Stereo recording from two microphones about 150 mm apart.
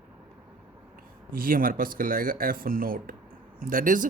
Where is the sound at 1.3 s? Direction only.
70° right (ahead or behind).